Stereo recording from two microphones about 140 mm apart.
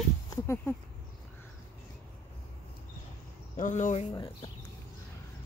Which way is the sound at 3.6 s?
65° left (ahead or behind).